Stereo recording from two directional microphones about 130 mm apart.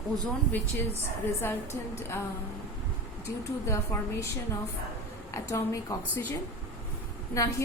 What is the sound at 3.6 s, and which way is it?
Speech, 25° left (ahead or behind).